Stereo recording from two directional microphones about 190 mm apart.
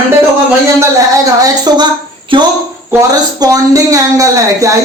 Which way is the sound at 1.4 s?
20° right (ahead or behind).